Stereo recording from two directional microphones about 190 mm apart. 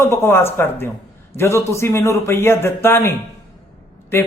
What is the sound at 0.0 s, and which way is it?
A man's voice, 15° left (ahead or behind).